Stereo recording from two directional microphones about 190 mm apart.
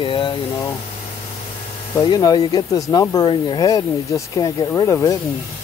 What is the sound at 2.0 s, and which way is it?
Speech, 20° left (ahead or behind).